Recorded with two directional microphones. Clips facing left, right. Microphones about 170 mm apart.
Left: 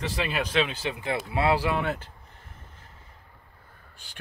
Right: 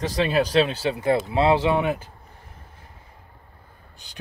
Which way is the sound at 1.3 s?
25° right (ahead or behind).